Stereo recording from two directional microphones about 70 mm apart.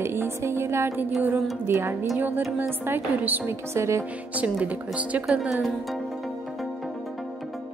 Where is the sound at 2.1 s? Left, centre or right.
Right.